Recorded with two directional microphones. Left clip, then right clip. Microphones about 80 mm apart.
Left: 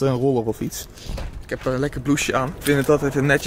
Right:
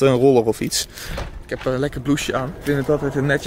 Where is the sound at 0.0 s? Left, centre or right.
Centre.